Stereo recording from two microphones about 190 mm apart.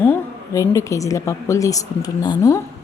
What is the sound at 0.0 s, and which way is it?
A woman's voice, 15° left (ahead or behind).